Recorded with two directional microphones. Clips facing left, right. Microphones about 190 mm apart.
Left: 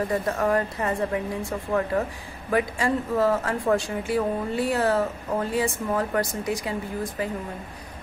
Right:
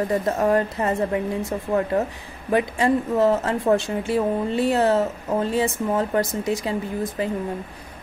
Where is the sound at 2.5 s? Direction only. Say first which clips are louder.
Right 4 dB; 20° right (ahead or behind).